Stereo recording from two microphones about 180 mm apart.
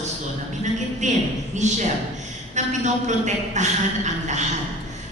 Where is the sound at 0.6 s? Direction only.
40° right (ahead or behind).